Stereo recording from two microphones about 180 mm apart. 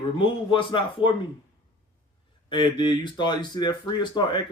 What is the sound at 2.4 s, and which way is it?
Speech, 25° left (ahead or behind).